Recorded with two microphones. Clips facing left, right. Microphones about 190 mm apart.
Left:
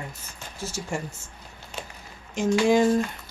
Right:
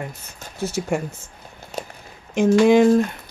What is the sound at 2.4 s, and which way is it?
Speech, 60° right (ahead or behind).